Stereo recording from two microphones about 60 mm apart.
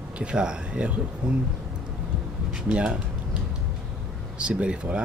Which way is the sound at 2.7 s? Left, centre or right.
Centre.